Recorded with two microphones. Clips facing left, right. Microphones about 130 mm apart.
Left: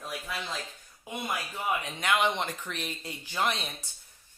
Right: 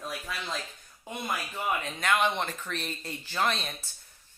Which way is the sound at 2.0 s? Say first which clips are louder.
Right 1 dB; 15° left (ahead or behind).